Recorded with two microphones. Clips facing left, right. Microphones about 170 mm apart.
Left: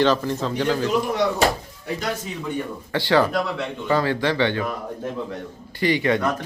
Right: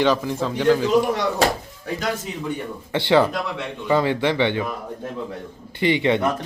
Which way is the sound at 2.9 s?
20° right (ahead or behind).